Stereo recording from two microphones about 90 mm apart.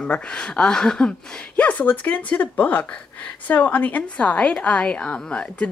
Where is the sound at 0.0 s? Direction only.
10° left (ahead or behind).